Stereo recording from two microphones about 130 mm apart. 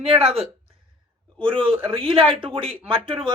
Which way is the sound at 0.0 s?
45° right (ahead or behind).